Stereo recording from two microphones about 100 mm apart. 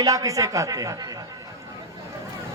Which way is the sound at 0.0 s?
40° right (ahead or behind).